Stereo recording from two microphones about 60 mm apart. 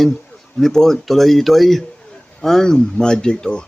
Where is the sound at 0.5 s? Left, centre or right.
Centre.